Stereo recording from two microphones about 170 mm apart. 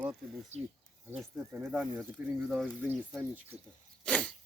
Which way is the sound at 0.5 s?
40° right (ahead or behind).